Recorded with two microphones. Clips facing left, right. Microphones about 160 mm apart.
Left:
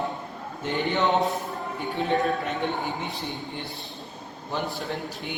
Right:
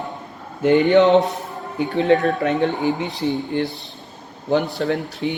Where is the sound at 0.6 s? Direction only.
85° right.